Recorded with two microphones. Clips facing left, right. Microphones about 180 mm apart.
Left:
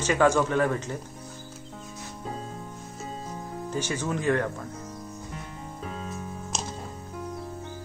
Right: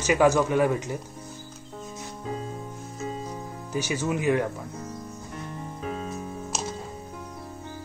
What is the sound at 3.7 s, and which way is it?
Speech, 10° right (ahead or behind).